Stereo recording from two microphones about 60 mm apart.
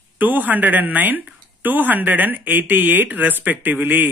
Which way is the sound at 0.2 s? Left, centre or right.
Right.